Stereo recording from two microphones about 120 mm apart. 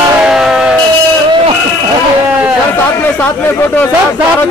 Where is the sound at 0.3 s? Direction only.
5° right (ahead or behind).